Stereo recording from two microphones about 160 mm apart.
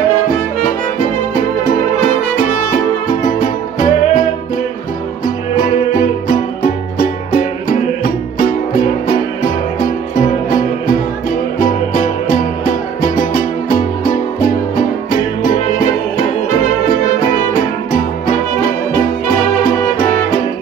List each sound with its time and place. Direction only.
3.3 s music: 55° left (ahead or behind)
5.2 s music: 65° left (ahead or behind)
11.6 s music: 60° left (ahead or behind)